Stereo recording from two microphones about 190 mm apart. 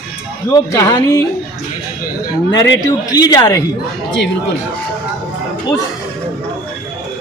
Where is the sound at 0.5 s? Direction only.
15° left (ahead or behind).